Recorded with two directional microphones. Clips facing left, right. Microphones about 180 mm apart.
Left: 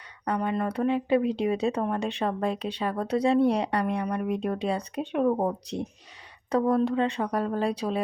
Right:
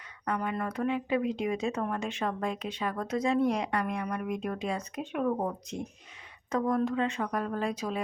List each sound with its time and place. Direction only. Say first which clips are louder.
0.3 s speech: left 4 dB; 30° left (ahead or behind)